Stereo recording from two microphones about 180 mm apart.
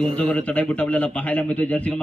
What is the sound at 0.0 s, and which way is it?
Speech, 35° right (ahead or behind).